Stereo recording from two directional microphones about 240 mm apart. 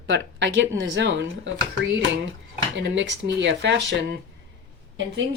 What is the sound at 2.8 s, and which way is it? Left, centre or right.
Speech, right.